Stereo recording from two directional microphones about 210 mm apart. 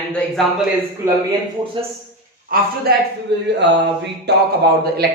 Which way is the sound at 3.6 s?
55° right (ahead or behind).